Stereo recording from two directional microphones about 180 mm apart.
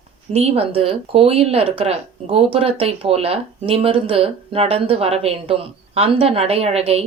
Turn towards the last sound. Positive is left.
turn(degrees=-35)  # may be behind; listen again after turning